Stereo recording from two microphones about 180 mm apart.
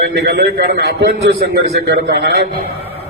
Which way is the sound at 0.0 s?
60° right (ahead or behind).